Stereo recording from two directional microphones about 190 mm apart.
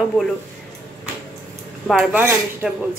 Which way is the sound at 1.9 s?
5° right (ahead or behind).